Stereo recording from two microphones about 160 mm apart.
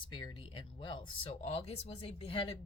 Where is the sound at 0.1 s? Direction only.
30° left (ahead or behind).